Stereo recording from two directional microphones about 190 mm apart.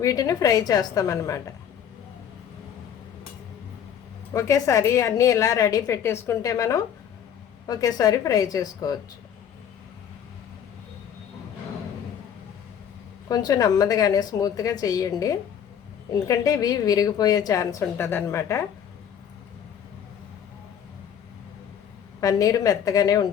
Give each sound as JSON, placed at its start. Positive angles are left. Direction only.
{"t": 0.0, "sound": "a woman's voice", "side_deg": 15}
{"t": 4.4, "sound": "a woman's voice", "side_deg": 15}
{"t": 13.2, "sound": "a woman's voice", "side_deg": 20}
{"t": 22.2, "sound": "a woman's voice", "side_deg": 20}